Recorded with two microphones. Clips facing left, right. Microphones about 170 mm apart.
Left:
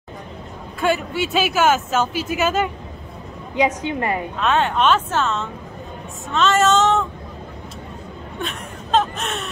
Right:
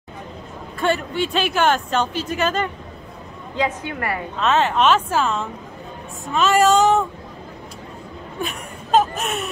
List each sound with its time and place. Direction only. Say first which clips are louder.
0.7 s a woman's voice: even; 5° left (ahead or behind)
3.5 s a woman's voice: left 4 dB; 20° left (ahead or behind)
4.4 s a woman's voice: right 2 dB; centre (ahead or behind)
9.2 s a woman's voice: right 2 dB; centre (ahead or behind)